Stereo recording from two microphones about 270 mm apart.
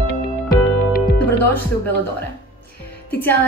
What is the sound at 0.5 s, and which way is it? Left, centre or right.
Music, left.